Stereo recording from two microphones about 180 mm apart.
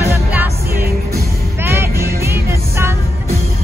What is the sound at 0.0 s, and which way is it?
Music, 10° right (ahead or behind).